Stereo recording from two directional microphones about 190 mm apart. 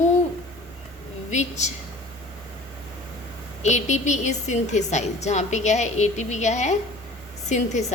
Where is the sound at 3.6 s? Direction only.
40° left (ahead or behind).